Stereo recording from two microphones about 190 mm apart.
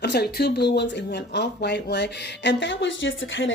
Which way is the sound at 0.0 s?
60° left (ahead or behind).